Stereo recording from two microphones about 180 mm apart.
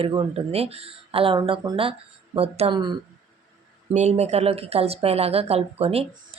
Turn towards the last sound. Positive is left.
turn(degrees=-35)  # may be behind; listen again after turning